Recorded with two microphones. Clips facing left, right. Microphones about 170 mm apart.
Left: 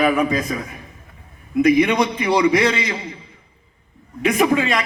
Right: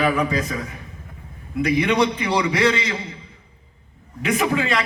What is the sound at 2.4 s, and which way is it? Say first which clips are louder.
Speech: left 2 dB; 30° left (ahead or behind).